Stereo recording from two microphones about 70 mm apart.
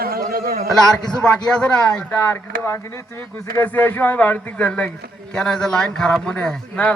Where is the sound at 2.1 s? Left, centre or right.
Left.